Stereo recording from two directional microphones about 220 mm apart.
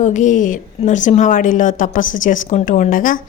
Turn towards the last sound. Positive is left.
turn(degrees=40)  # may be behind; listen again after turning